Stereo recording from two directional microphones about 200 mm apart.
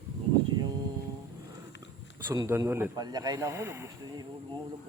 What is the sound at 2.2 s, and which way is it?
Speech, 15° right (ahead or behind).